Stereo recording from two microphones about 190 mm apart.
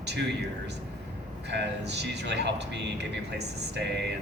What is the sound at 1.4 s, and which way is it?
Speech, 65° right (ahead or behind).